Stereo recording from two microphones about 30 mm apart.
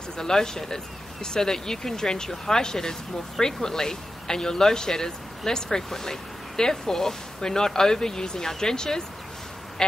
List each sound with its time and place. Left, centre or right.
0.2 s speech: centre